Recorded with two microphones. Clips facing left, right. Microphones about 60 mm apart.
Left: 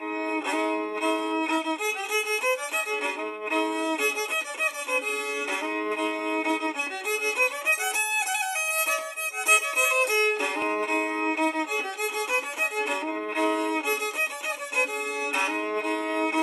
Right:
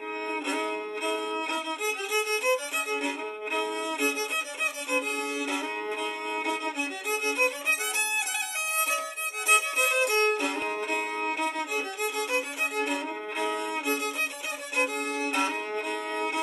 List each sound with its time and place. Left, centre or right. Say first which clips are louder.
0.3 s music: left 3 dB; centre
5.9 s music: left 4 dB; left
9.5 s violin: left 1 dB; centre
10.3 s violin: left 2 dB; left
15.3 s music: left 4 dB; centre